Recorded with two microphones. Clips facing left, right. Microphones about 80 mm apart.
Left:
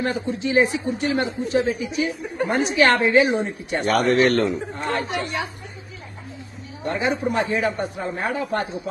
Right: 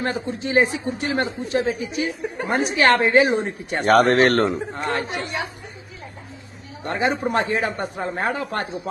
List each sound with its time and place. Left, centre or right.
0.0 s speech: right
6.8 s speech: right